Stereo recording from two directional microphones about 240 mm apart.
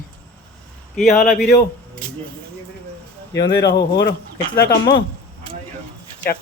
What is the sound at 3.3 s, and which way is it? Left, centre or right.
Speech, left.